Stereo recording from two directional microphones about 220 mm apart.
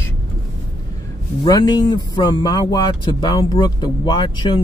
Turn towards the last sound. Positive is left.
turn(degrees=20)  # may be behind; listen again after turning